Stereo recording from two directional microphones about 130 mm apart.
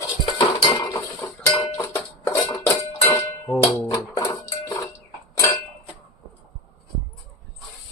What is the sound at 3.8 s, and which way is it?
Music, 30° left (ahead or behind).